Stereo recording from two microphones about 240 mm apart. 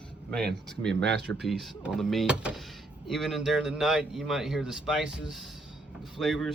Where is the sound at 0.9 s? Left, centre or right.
Right.